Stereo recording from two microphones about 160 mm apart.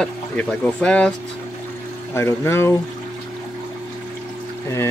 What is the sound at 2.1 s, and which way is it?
Speech, 15° left (ahead or behind).